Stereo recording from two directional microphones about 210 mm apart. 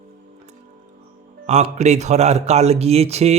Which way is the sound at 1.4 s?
30° right (ahead or behind).